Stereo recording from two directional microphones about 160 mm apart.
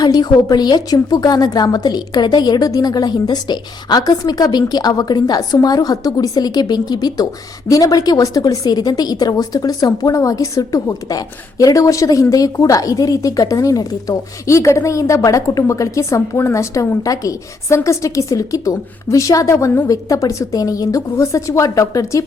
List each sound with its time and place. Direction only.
0.0 s speech: 25° left (ahead or behind)